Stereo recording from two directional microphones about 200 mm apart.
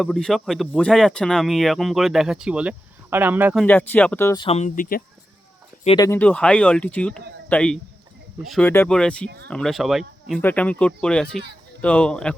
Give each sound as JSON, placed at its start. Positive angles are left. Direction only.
{"t": 0.0, "sound": "speech", "side_deg": 0}
{"t": 4.4, "sound": "speech", "side_deg": 30}
{"t": 5.8, "sound": "speech", "side_deg": 30}
{"t": 6.1, "sound": "speech", "side_deg": 10}